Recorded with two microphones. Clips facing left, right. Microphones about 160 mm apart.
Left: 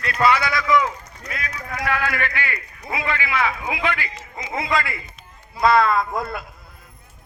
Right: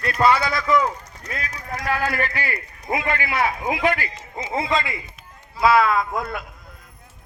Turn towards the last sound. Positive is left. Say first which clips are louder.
# left 1 dB
turn(degrees=0)  # may be behind; listen again after turning